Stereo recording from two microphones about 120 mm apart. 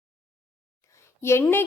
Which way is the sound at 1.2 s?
20° left (ahead or behind).